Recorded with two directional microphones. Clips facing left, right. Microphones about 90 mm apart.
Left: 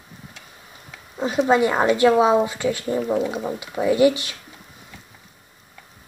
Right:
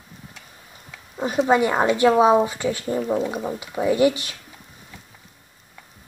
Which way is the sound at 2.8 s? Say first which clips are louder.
Even; 5° left (ahead or behind).